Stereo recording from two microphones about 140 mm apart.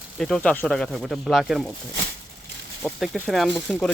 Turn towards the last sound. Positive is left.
turn(degrees=5)  # may be behind; listen again after turning